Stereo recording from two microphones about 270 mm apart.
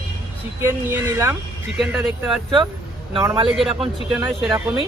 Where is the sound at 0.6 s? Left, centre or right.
Centre.